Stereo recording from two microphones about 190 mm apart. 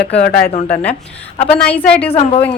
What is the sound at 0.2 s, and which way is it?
Speech, 50° left (ahead or behind).